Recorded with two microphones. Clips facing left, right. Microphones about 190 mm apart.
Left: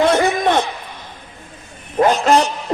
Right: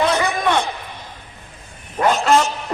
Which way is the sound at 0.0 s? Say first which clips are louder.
Left 4 dB; 50° left (ahead or behind).